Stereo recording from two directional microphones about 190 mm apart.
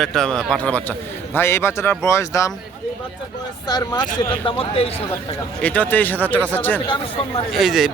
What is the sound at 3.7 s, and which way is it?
A man's voice, 20° left (ahead or behind).